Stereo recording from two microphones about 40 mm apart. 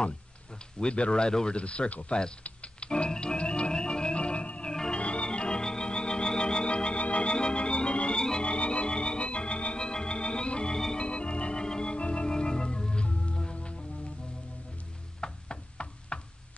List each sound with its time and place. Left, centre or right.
0.7 s speech: left
2.4 s organ: left
8.5 s organ: left
13.4 s music: left
15.1 s knock: left